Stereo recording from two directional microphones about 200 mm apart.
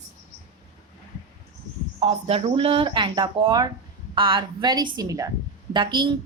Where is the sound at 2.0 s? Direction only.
30° right (ahead or behind).